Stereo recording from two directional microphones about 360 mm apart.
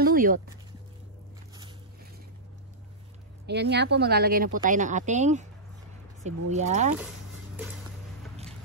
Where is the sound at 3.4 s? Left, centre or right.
Right.